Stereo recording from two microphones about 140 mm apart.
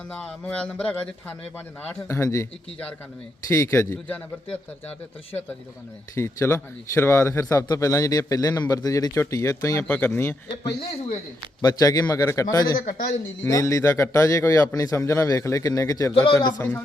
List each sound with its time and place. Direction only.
0.1 s speech: 5° left (ahead or behind)
3.5 s a man's voice: 20° left (ahead or behind)
6.1 s a man's voice: 20° left (ahead or behind)
9.8 s a man's voice: 10° left (ahead or behind)
16.1 s speech: 35° left (ahead or behind)
16.6 s speech: 15° left (ahead or behind)